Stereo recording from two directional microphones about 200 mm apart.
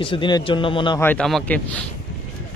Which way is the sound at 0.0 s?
25° left (ahead or behind).